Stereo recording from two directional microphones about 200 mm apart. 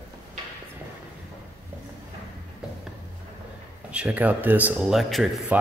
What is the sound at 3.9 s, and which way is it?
A man's voice, 5° right (ahead or behind).